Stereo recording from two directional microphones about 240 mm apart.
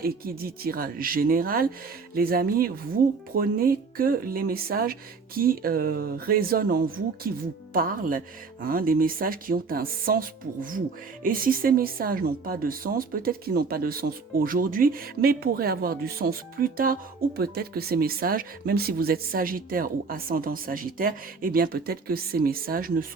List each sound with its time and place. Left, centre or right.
0.0 s speech: right